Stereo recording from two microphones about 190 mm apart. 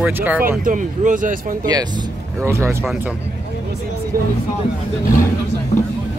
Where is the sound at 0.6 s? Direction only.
45° right (ahead or behind).